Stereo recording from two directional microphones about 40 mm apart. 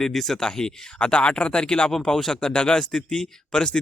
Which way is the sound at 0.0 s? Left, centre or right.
Centre.